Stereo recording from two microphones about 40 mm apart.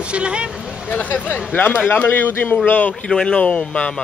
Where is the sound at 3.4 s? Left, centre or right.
Left.